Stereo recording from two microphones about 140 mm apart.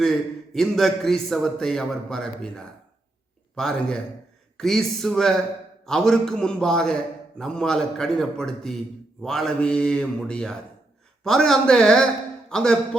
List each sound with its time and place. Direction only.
0.0 s a man's voice: centre (ahead or behind)